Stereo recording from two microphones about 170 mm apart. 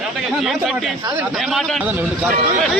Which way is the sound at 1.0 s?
25° right (ahead or behind).